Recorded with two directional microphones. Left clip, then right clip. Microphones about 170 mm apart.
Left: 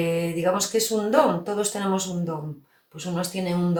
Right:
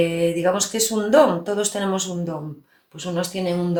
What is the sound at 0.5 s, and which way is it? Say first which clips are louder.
Speech: right 1 dB; 35° right (ahead or behind).